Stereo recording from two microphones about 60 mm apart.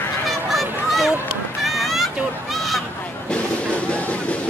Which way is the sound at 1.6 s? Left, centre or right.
Centre.